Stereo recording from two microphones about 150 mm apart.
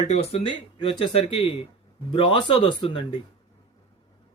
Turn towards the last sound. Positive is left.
turn(degrees=30)  # may be behind; listen again after turning